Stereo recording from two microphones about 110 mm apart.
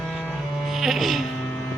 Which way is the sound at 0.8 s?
5° right (ahead or behind).